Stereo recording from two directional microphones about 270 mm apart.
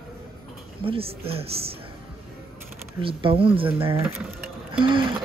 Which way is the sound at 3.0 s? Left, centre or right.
Centre.